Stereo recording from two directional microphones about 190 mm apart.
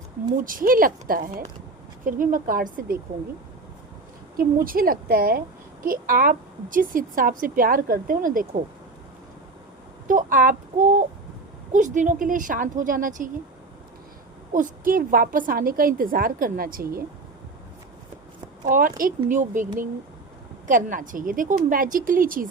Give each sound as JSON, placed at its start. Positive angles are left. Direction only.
{"t": 0.4, "sound": "a woman's voice", "side_deg": -45}
{"t": 4.4, "sound": "a woman's voice", "side_deg": -50}
{"t": 10.1, "sound": "a woman's voice", "side_deg": -45}
{"t": 14.5, "sound": "a woman's voice", "side_deg": -45}
{"t": 18.6, "sound": "a woman's voice", "side_deg": -45}